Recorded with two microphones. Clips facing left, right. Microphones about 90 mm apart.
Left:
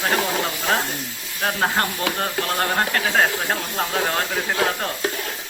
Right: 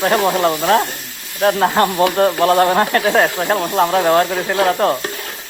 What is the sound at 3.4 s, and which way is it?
Speech, 90° right.